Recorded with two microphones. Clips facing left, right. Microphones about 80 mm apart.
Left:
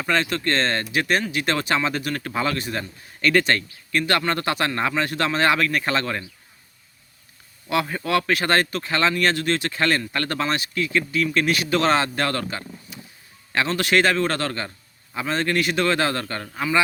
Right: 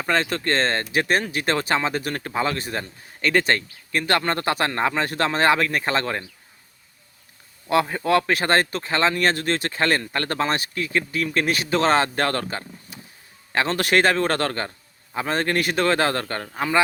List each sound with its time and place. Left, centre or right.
0.0 s speech: right
7.7 s speech: right